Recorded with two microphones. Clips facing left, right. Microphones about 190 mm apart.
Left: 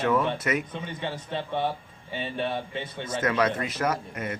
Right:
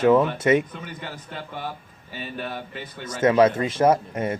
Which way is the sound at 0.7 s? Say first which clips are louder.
Left 3 dB; 25° left (ahead or behind).